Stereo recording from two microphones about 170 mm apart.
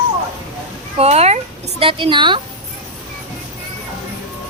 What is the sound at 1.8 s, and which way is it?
Speech, 35° right (ahead or behind).